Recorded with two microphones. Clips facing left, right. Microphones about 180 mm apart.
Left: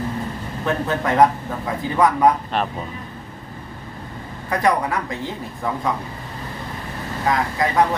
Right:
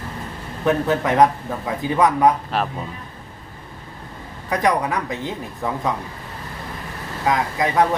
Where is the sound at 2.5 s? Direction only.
5° right (ahead or behind).